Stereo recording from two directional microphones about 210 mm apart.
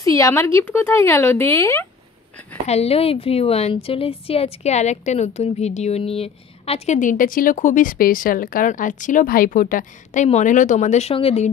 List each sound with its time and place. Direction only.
0.0 s speech: 15° left (ahead or behind)
2.6 s a woman's voice: 30° left (ahead or behind)